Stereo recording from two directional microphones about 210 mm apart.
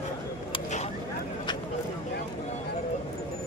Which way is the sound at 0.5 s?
30° left (ahead or behind).